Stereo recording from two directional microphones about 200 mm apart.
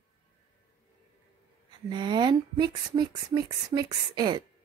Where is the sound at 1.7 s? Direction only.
25° right (ahead or behind).